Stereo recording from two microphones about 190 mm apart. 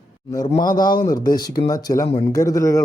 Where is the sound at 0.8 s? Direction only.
20° left (ahead or behind).